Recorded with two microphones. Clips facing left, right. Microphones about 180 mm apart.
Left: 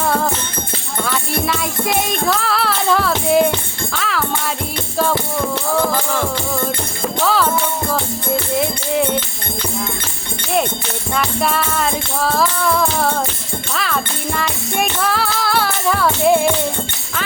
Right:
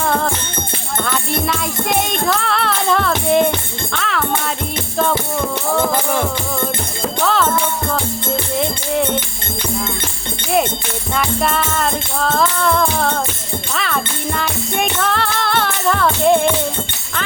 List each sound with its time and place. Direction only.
0.0 s music: 5° left (ahead or behind)
5.9 s music: 20° right (ahead or behind)
7.2 s music: 5° left (ahead or behind)
8.5 s music: 5° left (ahead or behind)
11.1 s music: centre (ahead or behind)